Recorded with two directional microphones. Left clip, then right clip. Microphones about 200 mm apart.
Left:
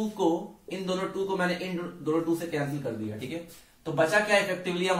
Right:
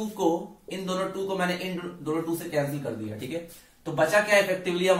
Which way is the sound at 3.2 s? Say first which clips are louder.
Right 3 dB; 15° left (ahead or behind).